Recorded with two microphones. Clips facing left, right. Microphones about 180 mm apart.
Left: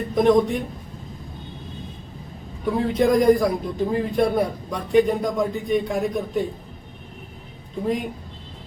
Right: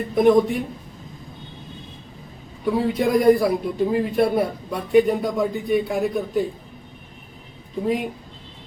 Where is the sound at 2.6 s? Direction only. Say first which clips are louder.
Left 1 dB; 5° right (ahead or behind).